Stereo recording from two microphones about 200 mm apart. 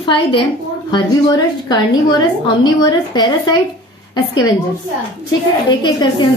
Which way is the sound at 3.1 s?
25° left (ahead or behind).